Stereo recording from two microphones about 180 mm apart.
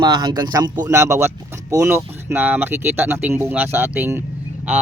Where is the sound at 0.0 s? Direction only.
25° right (ahead or behind).